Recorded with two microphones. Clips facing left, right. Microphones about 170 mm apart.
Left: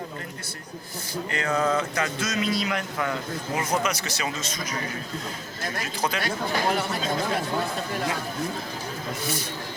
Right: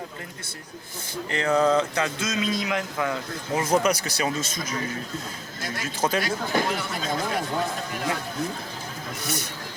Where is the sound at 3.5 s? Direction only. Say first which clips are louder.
Right 5 dB; 30° right (ahead or behind).